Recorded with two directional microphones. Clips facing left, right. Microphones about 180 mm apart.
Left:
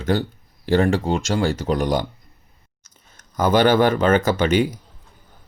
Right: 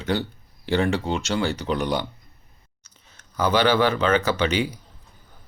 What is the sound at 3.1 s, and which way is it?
Speech, 50° left (ahead or behind).